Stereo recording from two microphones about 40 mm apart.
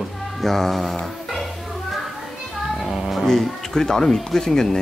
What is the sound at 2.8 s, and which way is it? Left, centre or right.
Music, centre.